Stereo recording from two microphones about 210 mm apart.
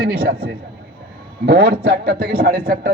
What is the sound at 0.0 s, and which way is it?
A man's voice, 45° right (ahead or behind).